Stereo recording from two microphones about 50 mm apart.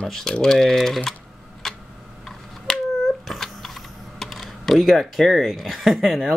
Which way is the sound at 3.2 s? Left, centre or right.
Centre.